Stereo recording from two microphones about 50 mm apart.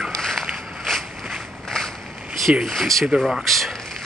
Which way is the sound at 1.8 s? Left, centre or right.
Centre.